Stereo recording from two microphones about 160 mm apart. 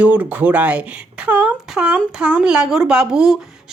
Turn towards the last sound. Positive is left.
turn(degrees=-5)  # may be behind; listen again after turning